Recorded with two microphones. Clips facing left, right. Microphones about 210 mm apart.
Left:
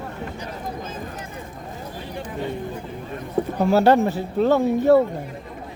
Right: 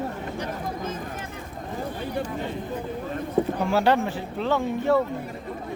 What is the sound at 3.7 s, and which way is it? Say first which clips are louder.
Speech: left 5 dB; 40° left (ahead or behind).